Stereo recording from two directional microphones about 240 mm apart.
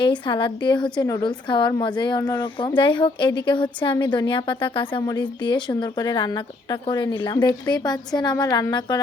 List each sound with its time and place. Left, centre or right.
0.0 s a woman's voice: centre